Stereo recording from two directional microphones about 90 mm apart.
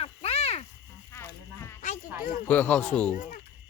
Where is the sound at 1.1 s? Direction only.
30° left (ahead or behind).